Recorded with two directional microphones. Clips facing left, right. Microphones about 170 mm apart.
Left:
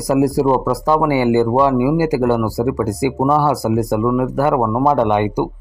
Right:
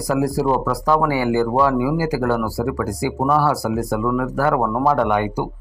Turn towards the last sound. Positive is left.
turn(degrees=20)  # may be behind; listen again after turning